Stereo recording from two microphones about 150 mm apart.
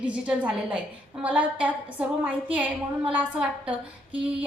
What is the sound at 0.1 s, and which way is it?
A woman's voice, 10° right (ahead or behind).